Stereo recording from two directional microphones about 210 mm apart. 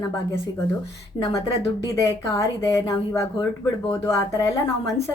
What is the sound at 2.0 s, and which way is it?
Speech, 15° left (ahead or behind).